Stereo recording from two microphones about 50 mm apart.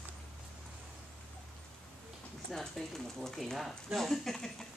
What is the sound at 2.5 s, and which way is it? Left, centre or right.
Speech, centre.